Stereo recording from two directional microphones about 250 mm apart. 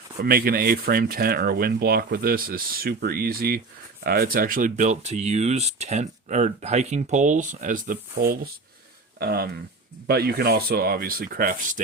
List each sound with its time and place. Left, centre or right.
0.2 s speech: right